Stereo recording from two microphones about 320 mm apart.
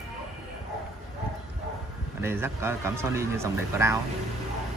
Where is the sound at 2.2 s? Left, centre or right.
Centre.